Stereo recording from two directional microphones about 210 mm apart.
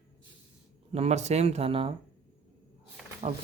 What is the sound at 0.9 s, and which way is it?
Speech, 30° right (ahead or behind).